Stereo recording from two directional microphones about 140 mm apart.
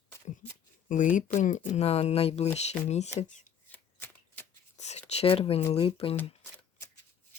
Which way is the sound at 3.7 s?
15° left (ahead or behind).